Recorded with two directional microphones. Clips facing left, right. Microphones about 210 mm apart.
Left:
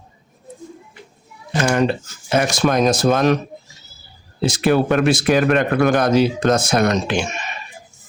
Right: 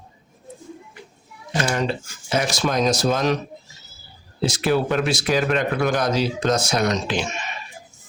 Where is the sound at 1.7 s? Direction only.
55° left (ahead or behind).